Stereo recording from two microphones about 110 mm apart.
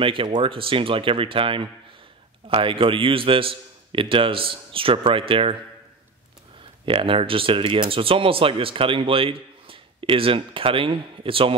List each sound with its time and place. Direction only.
0.0 s a man's voice: 50° right (ahead or behind)
6.9 s speech: 55° right (ahead or behind)